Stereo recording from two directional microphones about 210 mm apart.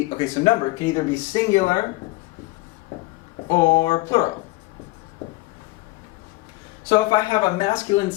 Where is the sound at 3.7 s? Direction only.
20° left (ahead or behind).